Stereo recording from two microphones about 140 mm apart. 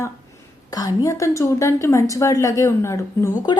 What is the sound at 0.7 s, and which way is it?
A woman's voice, 25° left (ahead or behind).